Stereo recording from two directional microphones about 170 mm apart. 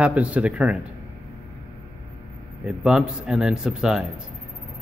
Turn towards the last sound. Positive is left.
turn(degrees=-5)  # may be behind; listen again after turning